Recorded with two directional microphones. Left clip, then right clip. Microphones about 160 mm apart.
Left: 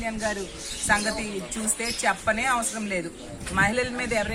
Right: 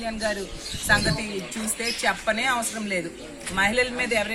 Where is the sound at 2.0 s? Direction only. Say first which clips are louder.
Even; 10° right (ahead or behind).